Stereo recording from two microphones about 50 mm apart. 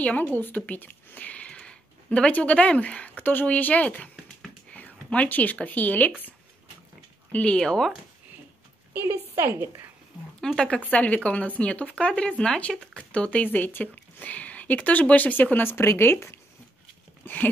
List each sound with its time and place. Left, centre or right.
0.2 s speech: left
0.7 s a sound: left
1.6 s speech: centre
3.2 s speech: left
7.4 s speech: centre
8.9 s a woman's voice: right
10.4 s speech: centre
10.9 s speech: left
13.4 s speech: left
15.5 s speech: left
17.2 s a sound: left